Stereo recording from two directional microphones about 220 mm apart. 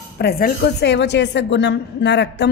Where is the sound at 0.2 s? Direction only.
45° left (ahead or behind).